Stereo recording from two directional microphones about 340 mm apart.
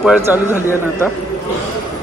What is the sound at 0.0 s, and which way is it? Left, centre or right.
A man's voice, centre.